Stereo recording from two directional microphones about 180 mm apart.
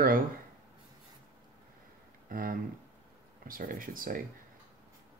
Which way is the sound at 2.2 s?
50° right (ahead or behind).